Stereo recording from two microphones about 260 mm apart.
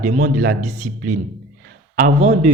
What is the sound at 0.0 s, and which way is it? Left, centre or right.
Speech, right.